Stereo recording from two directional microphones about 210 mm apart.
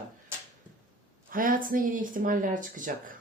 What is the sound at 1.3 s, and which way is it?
Speech, 40° right (ahead or behind).